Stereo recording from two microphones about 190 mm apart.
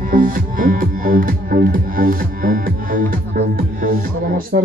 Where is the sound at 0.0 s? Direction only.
45° right (ahead or behind).